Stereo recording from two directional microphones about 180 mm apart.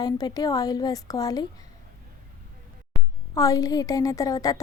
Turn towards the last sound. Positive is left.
turn(degrees=20)  # may be behind; listen again after turning